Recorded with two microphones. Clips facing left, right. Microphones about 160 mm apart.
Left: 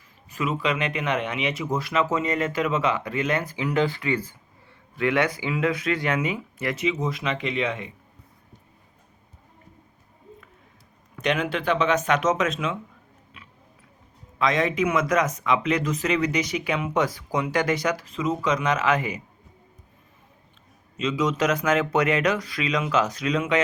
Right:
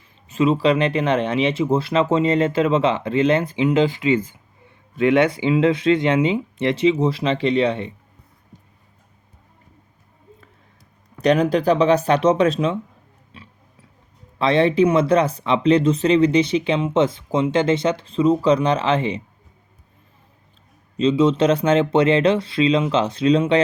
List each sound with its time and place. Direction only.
0.3 s speech: 25° right (ahead or behind)
11.2 s speech: 35° right (ahead or behind)
13.3 s a sound: 30° right (ahead or behind)
14.3 s speech: 30° right (ahead or behind)
20.9 s speech: 30° right (ahead or behind)